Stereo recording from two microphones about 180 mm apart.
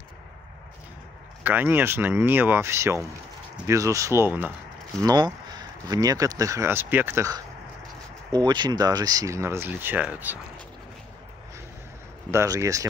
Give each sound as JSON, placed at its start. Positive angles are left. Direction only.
{"t": 1.4, "sound": "speech", "side_deg": -10}
{"t": 5.0, "sound": "speech", "side_deg": -25}
{"t": 12.3, "sound": "speech", "side_deg": -15}